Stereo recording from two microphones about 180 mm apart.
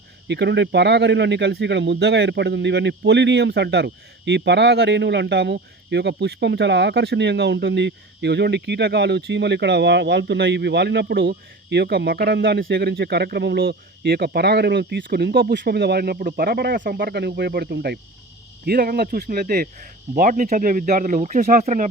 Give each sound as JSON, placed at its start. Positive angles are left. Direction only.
{"t": 0.3, "sound": "speech", "side_deg": -75}
{"t": 17.0, "sound": "speech", "side_deg": -65}